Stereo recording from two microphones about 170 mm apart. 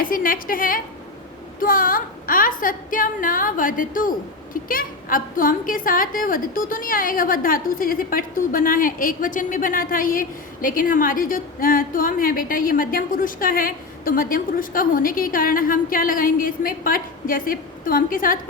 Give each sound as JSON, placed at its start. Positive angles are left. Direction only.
{"t": 0.0, "sound": "a woman's voice", "side_deg": 55}